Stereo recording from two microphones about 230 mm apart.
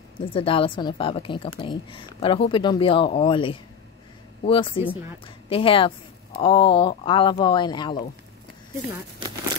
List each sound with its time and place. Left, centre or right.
0.2 s speech: left